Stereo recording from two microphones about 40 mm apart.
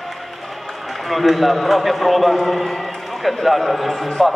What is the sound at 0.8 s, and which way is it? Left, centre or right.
A man's voice, centre.